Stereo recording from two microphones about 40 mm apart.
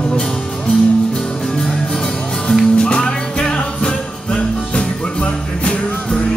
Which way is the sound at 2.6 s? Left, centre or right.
Left.